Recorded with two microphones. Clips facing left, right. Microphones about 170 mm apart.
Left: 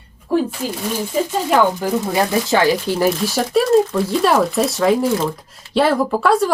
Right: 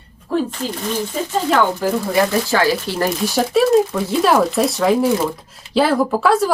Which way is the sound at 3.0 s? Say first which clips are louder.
Left 1 dB; centre (ahead or behind).